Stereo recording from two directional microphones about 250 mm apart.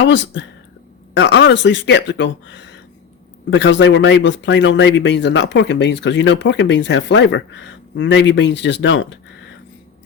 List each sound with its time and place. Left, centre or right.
0.0 s speech: left